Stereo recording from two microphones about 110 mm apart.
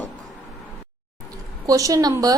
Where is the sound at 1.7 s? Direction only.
30° right (ahead or behind).